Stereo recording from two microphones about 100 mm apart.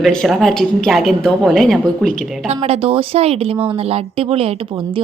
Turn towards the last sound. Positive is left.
turn(degrees=-70)  # may be behind; listen again after turning